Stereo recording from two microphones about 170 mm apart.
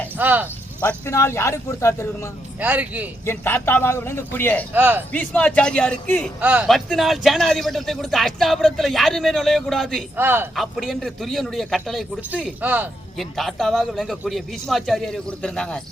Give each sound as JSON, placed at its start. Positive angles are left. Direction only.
{"t": 0.2, "sound": "speech", "side_deg": -10}
{"t": 0.8, "sound": "a man's voice", "side_deg": 15}
{"t": 2.6, "sound": "speech", "side_deg": -10}
{"t": 3.2, "sound": "a man's voice", "side_deg": 10}
{"t": 4.7, "sound": "speech", "side_deg": -10}
{"t": 5.1, "sound": "a man's voice", "side_deg": 10}
{"t": 6.4, "sound": "speech", "side_deg": -10}
{"t": 10.2, "sound": "speech", "side_deg": -10}
{"t": 10.5, "sound": "speech", "side_deg": 0}
{"t": 12.6, "sound": "speech", "side_deg": -10}
{"t": 13.1, "sound": "speech", "side_deg": 0}